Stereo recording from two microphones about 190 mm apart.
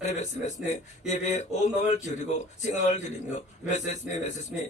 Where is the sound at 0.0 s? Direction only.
40° left (ahead or behind).